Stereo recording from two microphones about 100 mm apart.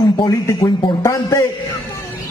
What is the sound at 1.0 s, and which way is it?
Speech, 30° left (ahead or behind).